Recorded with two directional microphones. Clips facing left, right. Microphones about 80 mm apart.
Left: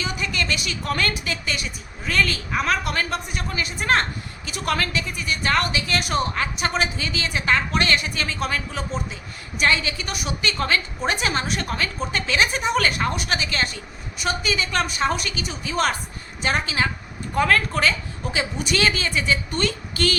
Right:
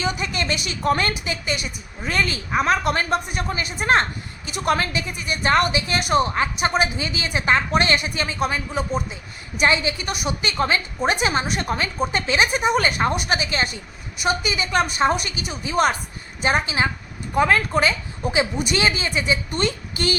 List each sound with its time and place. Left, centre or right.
0.0 s a woman's voice: right